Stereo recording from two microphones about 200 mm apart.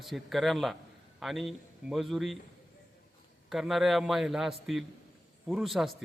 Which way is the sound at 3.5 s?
Centre (ahead or behind).